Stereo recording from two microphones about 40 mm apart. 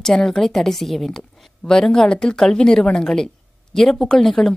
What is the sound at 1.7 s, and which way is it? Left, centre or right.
Speech, centre.